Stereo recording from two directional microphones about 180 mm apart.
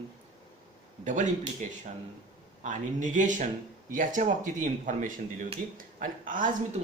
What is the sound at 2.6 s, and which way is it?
A woman's voice, 45° right (ahead or behind).